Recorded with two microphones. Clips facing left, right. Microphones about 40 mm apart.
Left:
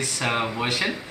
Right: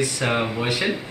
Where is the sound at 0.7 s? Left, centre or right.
Centre.